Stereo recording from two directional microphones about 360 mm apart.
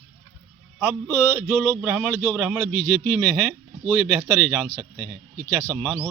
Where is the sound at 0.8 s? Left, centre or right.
Centre.